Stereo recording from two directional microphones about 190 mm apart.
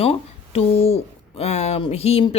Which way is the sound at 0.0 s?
30° left (ahead or behind).